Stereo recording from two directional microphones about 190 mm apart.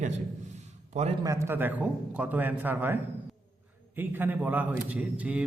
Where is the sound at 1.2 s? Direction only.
15° right (ahead or behind).